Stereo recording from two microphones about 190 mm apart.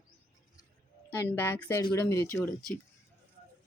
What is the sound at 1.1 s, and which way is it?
Speech, 15° left (ahead or behind).